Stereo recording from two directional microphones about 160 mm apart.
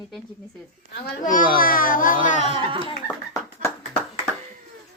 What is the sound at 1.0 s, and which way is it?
A child's voice, 55° left (ahead or behind).